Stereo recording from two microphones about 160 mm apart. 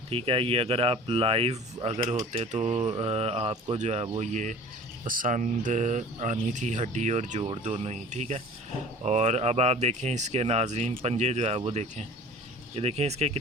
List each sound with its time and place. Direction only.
0.1 s speech: 35° right (ahead or behind)
5.0 s speech: 60° right (ahead or behind); by 13.4 s 40° right (ahead or behind)